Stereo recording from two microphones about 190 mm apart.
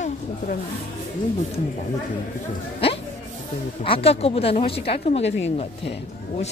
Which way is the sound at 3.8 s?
30° left (ahead or behind).